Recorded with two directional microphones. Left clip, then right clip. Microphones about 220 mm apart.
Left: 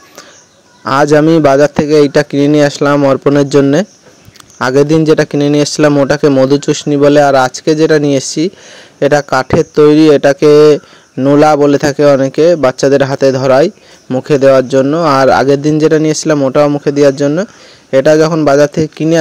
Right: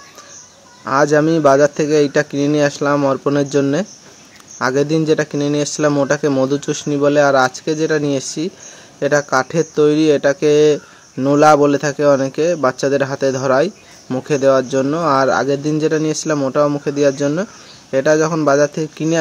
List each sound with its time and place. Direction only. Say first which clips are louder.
0.8 s speech: left 6 dB; 40° left (ahead or behind)